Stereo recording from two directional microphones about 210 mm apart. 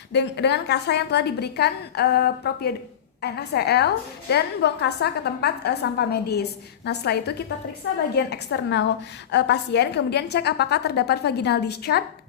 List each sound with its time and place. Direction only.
0.1 s a woman's voice: 55° left (ahead or behind)